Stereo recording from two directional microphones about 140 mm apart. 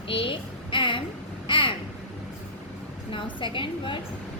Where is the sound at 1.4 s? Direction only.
35° left (ahead or behind).